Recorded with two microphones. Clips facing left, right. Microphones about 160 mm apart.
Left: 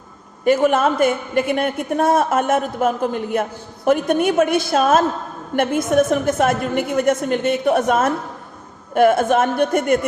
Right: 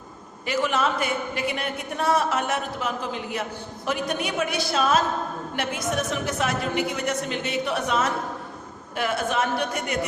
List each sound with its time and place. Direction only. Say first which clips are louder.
0.4 s a woman's voice: left 9 dB; 50° left (ahead or behind)